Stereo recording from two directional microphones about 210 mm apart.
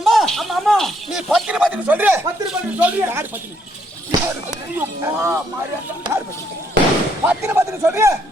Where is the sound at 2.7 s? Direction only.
10° right (ahead or behind).